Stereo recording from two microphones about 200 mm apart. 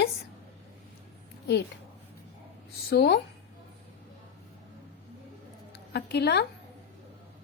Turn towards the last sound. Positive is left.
turn(degrees=55)  # may be behind; listen again after turning